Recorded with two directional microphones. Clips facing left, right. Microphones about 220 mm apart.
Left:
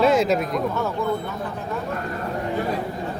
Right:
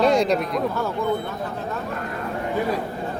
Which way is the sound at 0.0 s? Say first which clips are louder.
Even; 5° left (ahead or behind).